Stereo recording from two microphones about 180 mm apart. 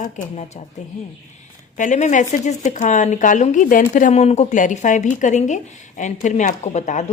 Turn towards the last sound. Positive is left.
turn(degrees=40)  # may be behind; listen again after turning